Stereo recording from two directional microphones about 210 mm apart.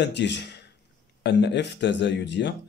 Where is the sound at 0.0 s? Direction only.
55° left (ahead or behind).